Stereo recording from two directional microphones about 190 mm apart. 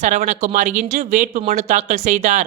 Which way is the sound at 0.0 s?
40° right (ahead or behind).